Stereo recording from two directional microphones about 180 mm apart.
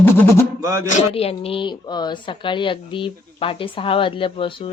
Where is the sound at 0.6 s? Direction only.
15° right (ahead or behind).